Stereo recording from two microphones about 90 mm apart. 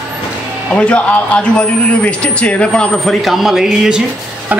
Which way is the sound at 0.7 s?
10° left (ahead or behind).